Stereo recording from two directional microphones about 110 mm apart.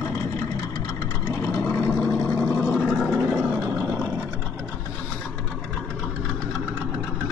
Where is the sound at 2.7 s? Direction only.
Centre (ahead or behind).